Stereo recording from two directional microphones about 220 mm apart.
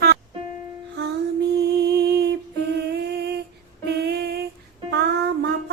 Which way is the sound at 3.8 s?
50° right (ahead or behind).